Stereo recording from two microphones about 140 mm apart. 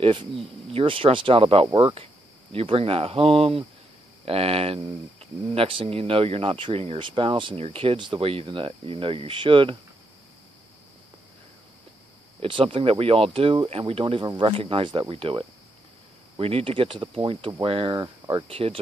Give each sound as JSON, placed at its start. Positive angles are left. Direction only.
{"t": 0.0, "sound": "speech", "side_deg": -40}
{"t": 1.7, "sound": "speech", "side_deg": -30}
{"t": 2.5, "sound": "speech", "side_deg": -40}
{"t": 12.4, "sound": "speech", "side_deg": -35}